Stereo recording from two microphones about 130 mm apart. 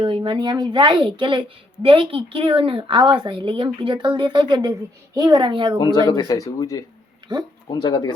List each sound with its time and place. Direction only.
0.0 s a woman's voice: 40° right (ahead or behind)
6.1 s speech: 30° left (ahead or behind)